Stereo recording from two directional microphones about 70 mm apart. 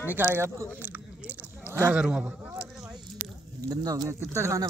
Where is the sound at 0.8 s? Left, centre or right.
Right.